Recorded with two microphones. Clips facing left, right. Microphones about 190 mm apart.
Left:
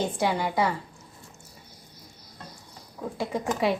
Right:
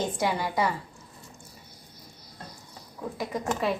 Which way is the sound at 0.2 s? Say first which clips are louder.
Left 2 dB; 20° left (ahead or behind).